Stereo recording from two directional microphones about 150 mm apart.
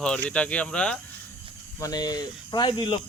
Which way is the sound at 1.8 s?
25° left (ahead or behind).